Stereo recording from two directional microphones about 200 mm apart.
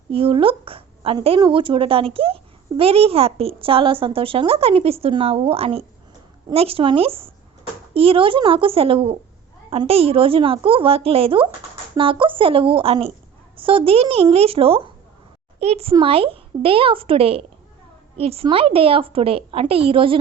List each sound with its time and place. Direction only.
0.1 s a woman's voice: 25° right (ahead or behind)